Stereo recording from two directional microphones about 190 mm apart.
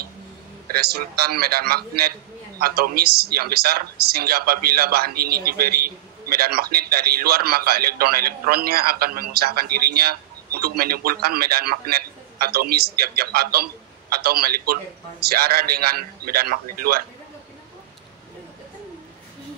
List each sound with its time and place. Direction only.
0.7 s a man's voice: 55° right (ahead or behind)